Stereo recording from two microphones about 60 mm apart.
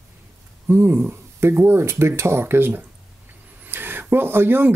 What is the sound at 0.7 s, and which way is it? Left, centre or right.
Speech, right.